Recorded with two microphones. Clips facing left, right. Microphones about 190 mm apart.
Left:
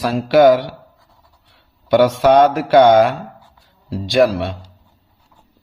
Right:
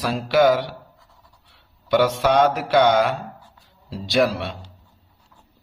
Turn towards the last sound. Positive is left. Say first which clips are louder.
# left 6 dB
turn(degrees=40)  # may be behind; listen again after turning